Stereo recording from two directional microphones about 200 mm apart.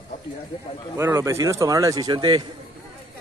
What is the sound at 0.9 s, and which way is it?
Speech, 15° right (ahead or behind).